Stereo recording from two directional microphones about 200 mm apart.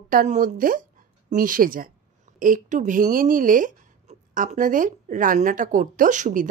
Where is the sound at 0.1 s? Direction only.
40° right (ahead or behind).